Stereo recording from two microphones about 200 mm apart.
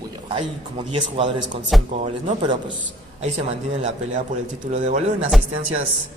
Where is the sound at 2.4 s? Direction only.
25° right (ahead or behind).